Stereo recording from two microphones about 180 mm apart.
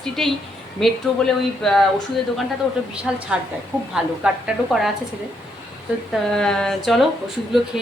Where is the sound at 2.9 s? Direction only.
5° right (ahead or behind).